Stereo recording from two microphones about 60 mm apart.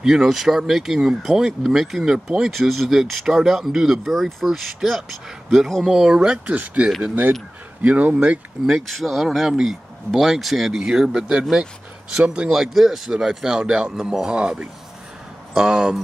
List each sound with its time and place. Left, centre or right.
0.0 s speech: centre
2.1 s speech: centre
2.5 s speech: centre
6.4 s speech: right
8.6 s speech: centre